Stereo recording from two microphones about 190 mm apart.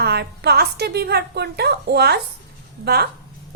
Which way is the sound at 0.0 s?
60° right (ahead or behind).